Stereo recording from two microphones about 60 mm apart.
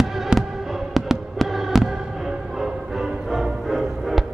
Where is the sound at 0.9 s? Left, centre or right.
Centre.